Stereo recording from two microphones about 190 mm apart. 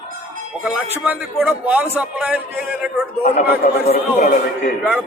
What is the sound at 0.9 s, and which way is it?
A man's voice, 5° right (ahead or behind).